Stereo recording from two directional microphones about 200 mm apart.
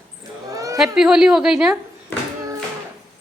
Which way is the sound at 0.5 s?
15° right (ahead or behind).